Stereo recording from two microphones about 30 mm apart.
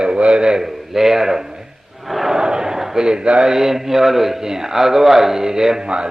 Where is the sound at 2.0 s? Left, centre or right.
Centre.